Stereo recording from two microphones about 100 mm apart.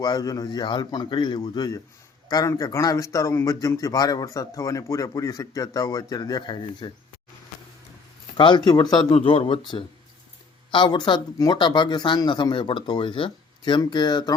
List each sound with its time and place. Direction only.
0.0 s speech: 40° left (ahead or behind)
8.4 s speech: 50° left (ahead or behind)
9.1 s speech: 65° left (ahead or behind); by 14.3 s 50° left (ahead or behind)